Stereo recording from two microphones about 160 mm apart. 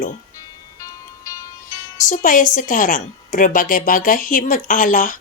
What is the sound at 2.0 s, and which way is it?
A woman's voice, 55° left (ahead or behind).